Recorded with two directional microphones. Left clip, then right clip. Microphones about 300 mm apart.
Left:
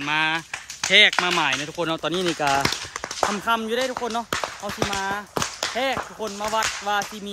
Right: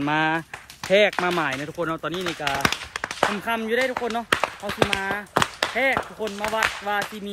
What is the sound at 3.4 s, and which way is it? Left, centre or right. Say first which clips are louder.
Speech: even; centre.